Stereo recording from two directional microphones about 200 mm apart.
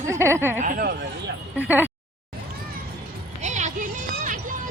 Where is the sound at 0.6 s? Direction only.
45° right (ahead or behind).